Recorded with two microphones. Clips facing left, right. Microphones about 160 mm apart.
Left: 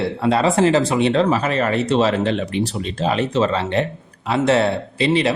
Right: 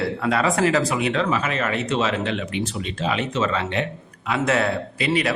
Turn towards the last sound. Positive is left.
turn(degrees=30)  # may be behind; listen again after turning